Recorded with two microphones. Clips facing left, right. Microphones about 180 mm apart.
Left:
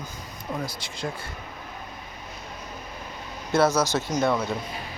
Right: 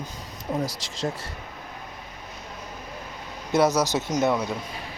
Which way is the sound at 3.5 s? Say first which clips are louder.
Even; 15° right (ahead or behind).